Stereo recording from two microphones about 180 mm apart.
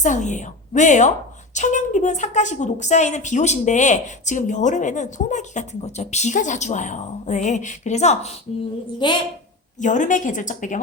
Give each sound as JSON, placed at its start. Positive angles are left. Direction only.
{"t": 0.0, "sound": "a woman's voice", "side_deg": 40}
{"t": 9.0, "sound": "a woman's voice", "side_deg": 25}
{"t": 9.7, "sound": "speech", "side_deg": 45}